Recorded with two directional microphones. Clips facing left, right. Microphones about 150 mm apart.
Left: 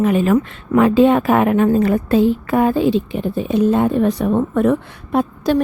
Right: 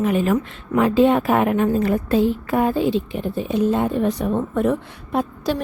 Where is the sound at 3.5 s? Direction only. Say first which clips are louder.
Left 4 dB; 65° left (ahead or behind).